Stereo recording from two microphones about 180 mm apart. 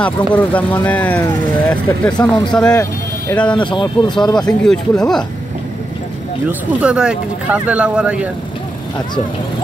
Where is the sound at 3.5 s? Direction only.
25° left (ahead or behind).